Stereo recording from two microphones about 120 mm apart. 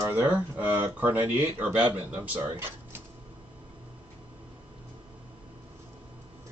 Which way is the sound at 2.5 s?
20° right (ahead or behind).